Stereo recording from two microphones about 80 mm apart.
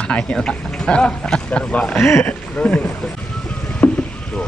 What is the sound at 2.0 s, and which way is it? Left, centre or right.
Speech, left.